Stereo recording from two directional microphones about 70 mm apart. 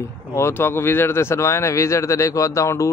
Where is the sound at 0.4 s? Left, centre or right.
Left.